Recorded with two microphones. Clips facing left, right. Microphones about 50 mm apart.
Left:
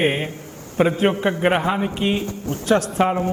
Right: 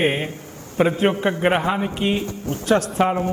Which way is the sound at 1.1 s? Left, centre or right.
Left.